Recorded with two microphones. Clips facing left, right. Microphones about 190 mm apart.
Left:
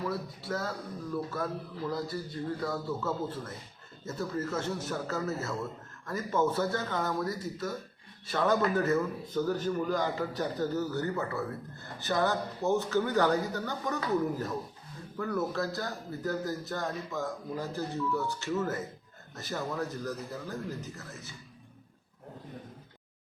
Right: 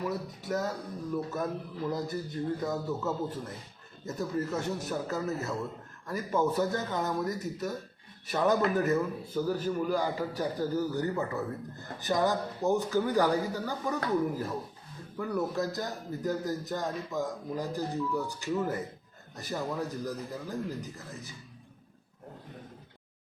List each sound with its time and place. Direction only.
0.0 s a man's voice: 15° right (ahead or behind)